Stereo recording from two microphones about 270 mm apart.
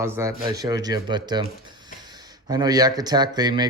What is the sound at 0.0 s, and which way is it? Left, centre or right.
Speech, centre.